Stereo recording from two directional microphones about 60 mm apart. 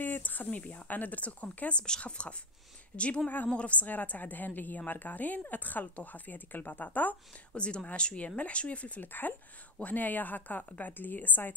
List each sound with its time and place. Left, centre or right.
0.0 s a woman's voice: left
3.4 s a woman's voice: left
7.5 s a woman's voice: centre